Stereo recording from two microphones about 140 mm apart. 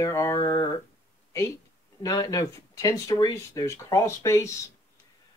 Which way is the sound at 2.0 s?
25° left (ahead or behind).